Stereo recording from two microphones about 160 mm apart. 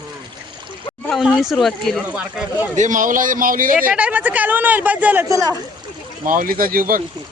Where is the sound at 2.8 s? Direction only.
55° right (ahead or behind).